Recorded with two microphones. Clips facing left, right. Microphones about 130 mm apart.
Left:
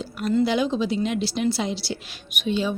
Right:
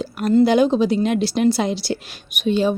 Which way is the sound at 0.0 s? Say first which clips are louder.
Right 5 dB; 55° right (ahead or behind).